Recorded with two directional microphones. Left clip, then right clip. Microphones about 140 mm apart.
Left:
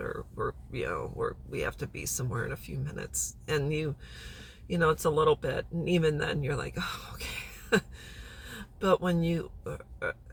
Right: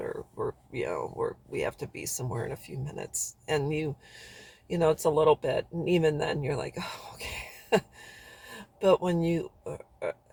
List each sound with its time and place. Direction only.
0.7 s speech: 20° right (ahead or behind)